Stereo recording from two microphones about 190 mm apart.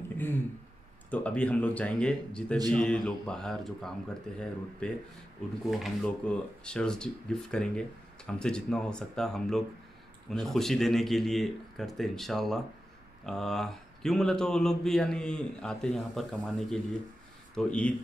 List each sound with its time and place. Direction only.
1.1 s speech: 5° left (ahead or behind)